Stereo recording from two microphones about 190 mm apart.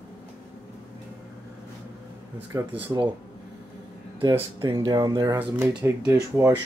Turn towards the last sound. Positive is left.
turn(degrees=-10)  # may be behind; listen again after turning